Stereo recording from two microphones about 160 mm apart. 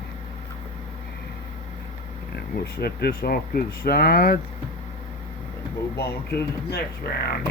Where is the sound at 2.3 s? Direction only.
85° left.